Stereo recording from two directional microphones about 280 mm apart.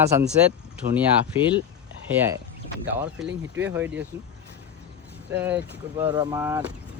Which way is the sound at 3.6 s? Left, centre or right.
Centre.